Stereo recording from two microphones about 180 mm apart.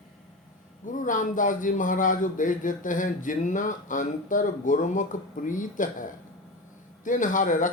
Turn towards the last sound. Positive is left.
turn(degrees=45)  # may be behind; listen again after turning